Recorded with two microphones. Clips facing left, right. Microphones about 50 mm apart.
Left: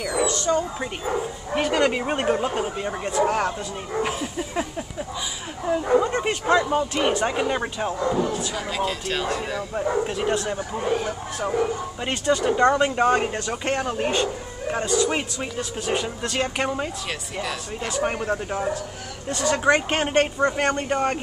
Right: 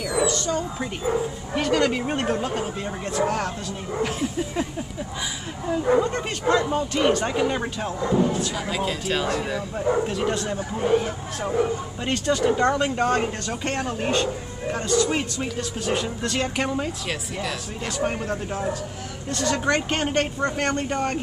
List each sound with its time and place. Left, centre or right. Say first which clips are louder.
0.0 s a man's voice: even; centre
8.5 s speech: even; centre
9.8 s a man's voice: right 1 dB; centre
18.0 s a man's voice: even; centre